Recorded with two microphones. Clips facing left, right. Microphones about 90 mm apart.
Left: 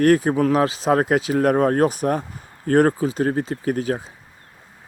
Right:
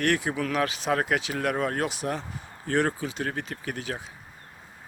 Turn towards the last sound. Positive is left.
turn(degrees=35)  # may be behind; listen again after turning